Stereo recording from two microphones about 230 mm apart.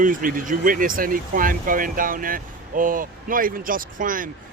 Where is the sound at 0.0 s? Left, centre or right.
Right.